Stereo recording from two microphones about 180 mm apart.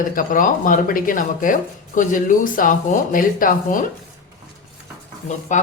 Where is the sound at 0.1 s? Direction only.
50° left (ahead or behind).